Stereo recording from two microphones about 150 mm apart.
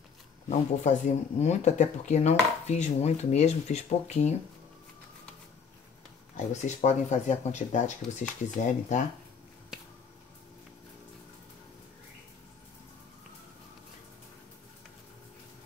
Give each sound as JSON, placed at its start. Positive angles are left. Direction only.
{"t": 0.5, "sound": "speech", "side_deg": 50}
{"t": 6.3, "sound": "speech", "side_deg": 50}